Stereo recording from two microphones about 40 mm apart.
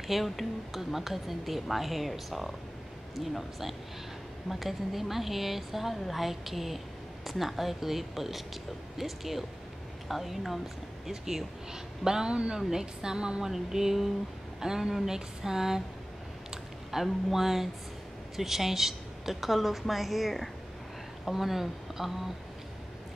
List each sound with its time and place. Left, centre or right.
0.0 s speech: centre
16.4 s a sound: centre
18.3 s speech: centre